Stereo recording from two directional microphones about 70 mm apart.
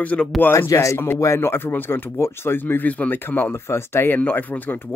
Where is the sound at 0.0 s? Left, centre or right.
Left.